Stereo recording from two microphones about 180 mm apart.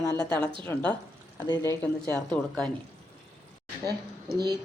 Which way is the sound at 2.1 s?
5° left (ahead or behind).